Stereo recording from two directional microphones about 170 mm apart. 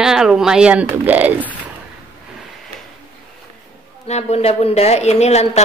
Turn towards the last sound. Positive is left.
turn(degrees=40)  # may be behind; listen again after turning